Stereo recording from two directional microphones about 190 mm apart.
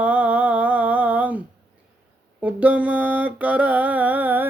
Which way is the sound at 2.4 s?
10° right (ahead or behind).